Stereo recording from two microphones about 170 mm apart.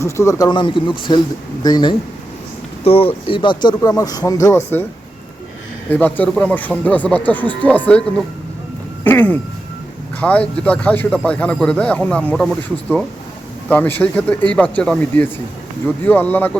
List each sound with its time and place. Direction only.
0.0 s speech: 15° left (ahead or behind)
5.9 s a man's voice: 10° left (ahead or behind)
9.0 s a man's voice: 10° left (ahead or behind)
13.7 s a man's voice: 10° left (ahead or behind)